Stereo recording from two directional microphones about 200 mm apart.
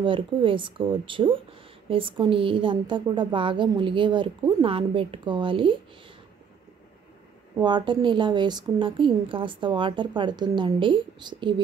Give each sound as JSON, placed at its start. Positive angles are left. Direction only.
{"t": 0.0, "sound": "a woman's voice", "side_deg": -25}
{"t": 7.6, "sound": "a woman's voice", "side_deg": -20}